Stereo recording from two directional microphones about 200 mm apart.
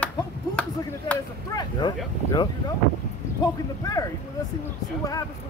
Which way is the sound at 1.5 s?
20° left (ahead or behind).